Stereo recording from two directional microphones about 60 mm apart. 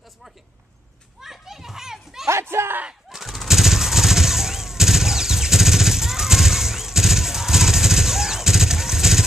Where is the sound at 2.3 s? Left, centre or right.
Right.